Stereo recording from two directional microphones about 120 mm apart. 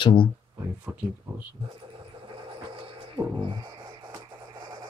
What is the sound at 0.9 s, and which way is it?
Speech, 25° right (ahead or behind).